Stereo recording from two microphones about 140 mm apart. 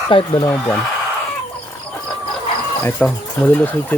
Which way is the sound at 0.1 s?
35° left (ahead or behind).